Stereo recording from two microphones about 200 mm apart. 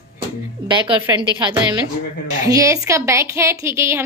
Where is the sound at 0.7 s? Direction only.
25° right (ahead or behind).